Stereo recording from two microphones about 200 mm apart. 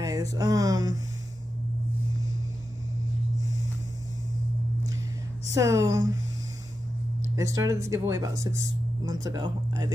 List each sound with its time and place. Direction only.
0.0 s speech: 15° right (ahead or behind)
5.6 s speech: 15° right (ahead or behind)
7.3 s speech: 15° right (ahead or behind)